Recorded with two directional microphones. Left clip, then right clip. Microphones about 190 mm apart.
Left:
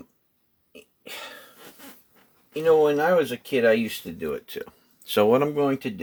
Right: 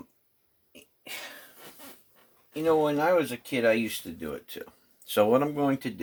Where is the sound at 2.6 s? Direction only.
30° left (ahead or behind).